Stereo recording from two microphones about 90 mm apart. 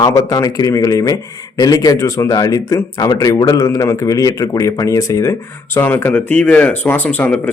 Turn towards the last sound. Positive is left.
turn(degrees=15)  # may be behind; listen again after turning